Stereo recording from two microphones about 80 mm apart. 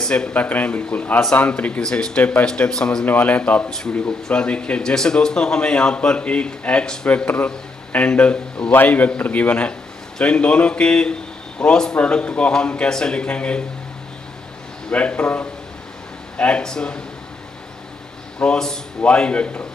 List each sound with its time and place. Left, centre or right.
0.0 s a man's voice: centre
3.1 s a man's voice: left
14.9 s a man's voice: centre
18.4 s a man's voice: centre